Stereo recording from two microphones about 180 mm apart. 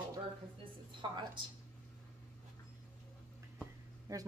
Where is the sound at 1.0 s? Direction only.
25° right (ahead or behind).